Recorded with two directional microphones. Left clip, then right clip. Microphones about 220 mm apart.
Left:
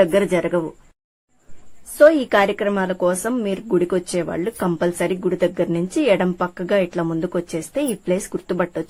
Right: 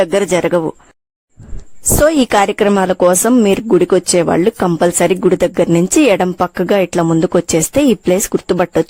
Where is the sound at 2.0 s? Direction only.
55° right (ahead or behind).